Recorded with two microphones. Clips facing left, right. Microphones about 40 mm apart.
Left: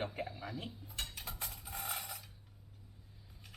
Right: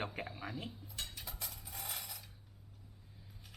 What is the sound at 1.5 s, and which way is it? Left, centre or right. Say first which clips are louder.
Mechanisms: left 4 dB; left.